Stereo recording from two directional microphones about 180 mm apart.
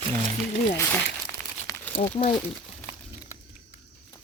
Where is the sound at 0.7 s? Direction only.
15° left (ahead or behind).